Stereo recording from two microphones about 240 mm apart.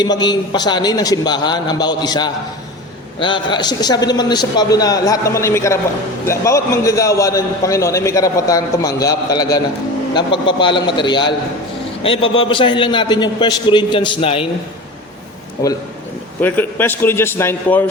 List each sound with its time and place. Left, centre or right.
0.0 s a man's voice: centre
16.4 s a man's voice: centre